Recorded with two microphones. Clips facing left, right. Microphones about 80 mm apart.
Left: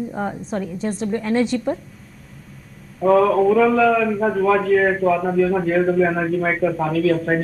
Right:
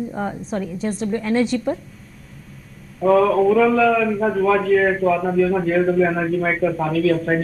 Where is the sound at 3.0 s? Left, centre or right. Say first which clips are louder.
Even; left.